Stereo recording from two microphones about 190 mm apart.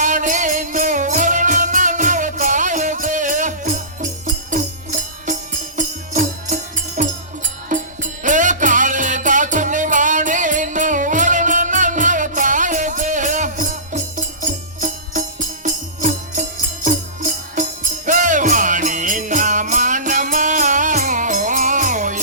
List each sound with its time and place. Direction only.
0.0 s music: 45° right (ahead or behind)